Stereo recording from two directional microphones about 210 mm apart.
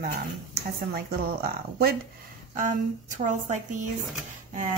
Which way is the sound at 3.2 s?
35° right (ahead or behind).